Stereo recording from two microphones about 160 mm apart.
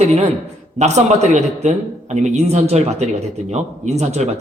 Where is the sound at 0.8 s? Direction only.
45° right (ahead or behind).